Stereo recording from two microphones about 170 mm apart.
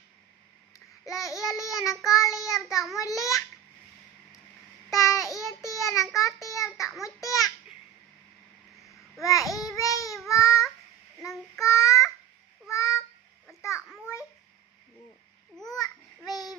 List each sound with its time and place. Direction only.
1.0 s child singing: 20° left (ahead or behind)
3.0 s a child's voice: 20° left (ahead or behind)
4.9 s child singing: 20° left (ahead or behind)
6.1 s a child's voice: 20° left (ahead or behind)
9.2 s babbling: 20° left (ahead or behind)
10.2 s baby cry: 20° left (ahead or behind)
11.6 s babbling: 20° left (ahead or behind)
13.6 s a sound: 20° left (ahead or behind)
15.5 s babbling: 5° left (ahead or behind)
15.8 s babbling: 20° left (ahead or behind)